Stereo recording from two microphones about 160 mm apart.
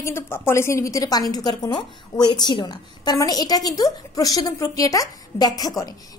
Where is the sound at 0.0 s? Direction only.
15° left (ahead or behind).